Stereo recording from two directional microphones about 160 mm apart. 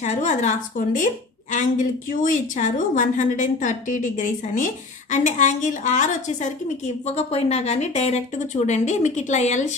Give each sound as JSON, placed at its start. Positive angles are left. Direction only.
{"t": 0.0, "sound": "a woman's voice", "side_deg": 50}